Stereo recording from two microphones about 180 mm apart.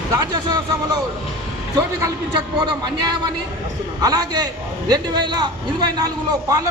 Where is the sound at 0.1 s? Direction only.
20° right (ahead or behind).